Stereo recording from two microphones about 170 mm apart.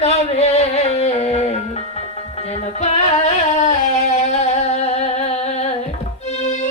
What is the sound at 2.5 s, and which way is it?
Singing, 40° left (ahead or behind).